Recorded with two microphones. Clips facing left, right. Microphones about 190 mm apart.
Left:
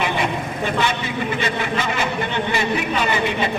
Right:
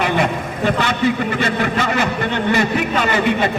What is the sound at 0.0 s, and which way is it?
Vehicle, 50° right (ahead or behind).